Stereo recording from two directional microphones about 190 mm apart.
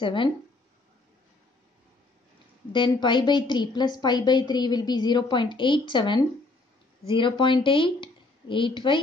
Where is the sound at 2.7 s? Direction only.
25° left (ahead or behind).